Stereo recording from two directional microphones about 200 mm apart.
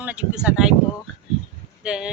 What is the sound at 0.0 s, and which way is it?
Speech, 5° right (ahead or behind).